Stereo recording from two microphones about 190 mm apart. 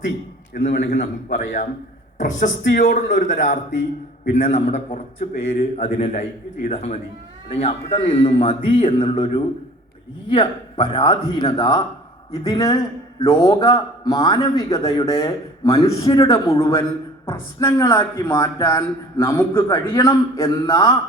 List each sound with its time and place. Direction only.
0.5 s a man's voice: 40° left (ahead or behind); by 20.9 s 20° left (ahead or behind)